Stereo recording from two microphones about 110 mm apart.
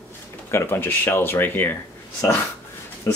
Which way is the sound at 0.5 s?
20° left (ahead or behind).